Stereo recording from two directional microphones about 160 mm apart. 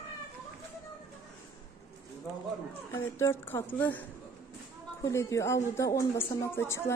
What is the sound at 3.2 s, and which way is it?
Speech, 15° left (ahead or behind).